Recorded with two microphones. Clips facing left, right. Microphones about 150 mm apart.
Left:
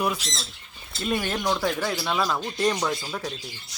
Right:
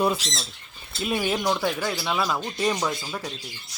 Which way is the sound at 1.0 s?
5° right (ahead or behind).